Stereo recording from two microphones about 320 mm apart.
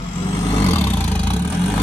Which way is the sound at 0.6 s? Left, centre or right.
Centre.